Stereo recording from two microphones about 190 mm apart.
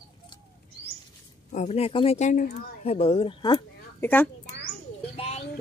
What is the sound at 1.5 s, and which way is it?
Speech, 35° left (ahead or behind).